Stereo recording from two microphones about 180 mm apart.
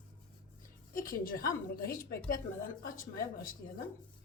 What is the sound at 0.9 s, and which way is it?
A woman's voice, 50° left (ahead or behind).